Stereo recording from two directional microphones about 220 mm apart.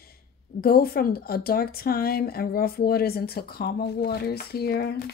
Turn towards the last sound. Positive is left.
turn(degrees=45)  # may be behind; listen again after turning